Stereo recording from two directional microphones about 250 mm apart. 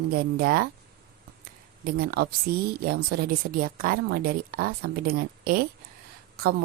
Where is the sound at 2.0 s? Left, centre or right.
Right.